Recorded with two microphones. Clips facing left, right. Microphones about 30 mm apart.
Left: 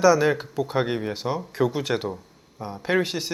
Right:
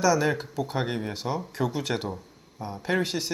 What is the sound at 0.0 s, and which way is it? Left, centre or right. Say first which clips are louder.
Speech: left 5 dB; centre.